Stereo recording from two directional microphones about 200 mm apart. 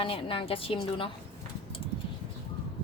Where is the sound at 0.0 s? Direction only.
25° left (ahead or behind).